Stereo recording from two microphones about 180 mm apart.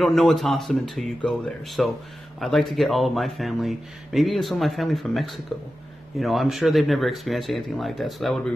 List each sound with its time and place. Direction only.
0.0 s speech: centre (ahead or behind)